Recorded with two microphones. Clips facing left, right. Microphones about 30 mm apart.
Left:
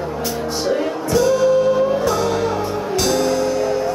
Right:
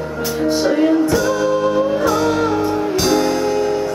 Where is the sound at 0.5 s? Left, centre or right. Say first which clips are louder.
Right 7 dB; right.